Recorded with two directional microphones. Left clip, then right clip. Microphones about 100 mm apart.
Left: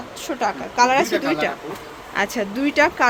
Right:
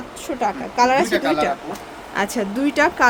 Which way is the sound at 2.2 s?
25° right (ahead or behind).